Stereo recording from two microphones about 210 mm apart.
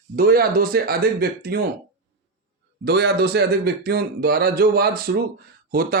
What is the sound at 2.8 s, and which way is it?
A man's voice, 50° right (ahead or behind).